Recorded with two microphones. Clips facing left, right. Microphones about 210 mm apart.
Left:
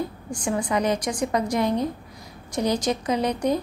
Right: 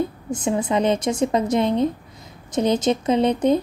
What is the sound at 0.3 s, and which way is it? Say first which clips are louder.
A woman's voice: right 3 dB; 20° right (ahead or behind).